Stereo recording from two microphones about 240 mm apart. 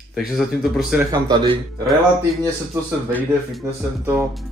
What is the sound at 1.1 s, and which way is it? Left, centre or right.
Speech, centre.